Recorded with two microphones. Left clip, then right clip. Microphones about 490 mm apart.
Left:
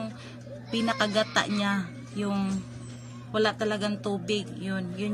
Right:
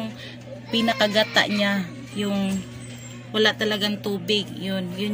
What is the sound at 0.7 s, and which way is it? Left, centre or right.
Speech, left.